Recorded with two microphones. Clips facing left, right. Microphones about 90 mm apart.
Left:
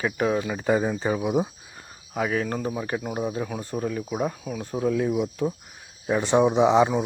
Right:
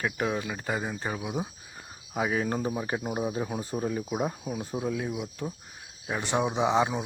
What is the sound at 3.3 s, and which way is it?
Speech, 20° right (ahead or behind).